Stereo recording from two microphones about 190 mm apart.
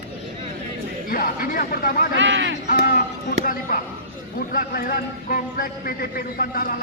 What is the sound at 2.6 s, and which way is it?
A man's voice, 45° left (ahead or behind).